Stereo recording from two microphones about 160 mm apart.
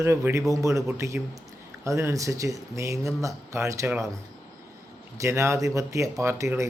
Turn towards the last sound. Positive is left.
turn(degrees=-20)  # may be behind; listen again after turning